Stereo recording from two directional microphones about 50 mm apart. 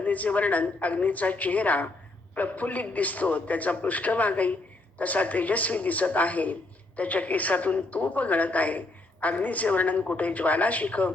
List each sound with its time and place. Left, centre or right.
0.0 s a man's voice: left